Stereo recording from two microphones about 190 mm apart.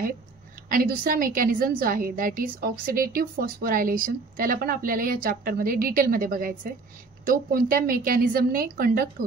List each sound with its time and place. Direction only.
0.7 s a woman's voice: 50° right (ahead or behind)